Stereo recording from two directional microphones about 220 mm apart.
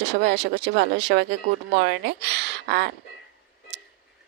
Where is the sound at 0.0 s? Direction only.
50° right (ahead or behind).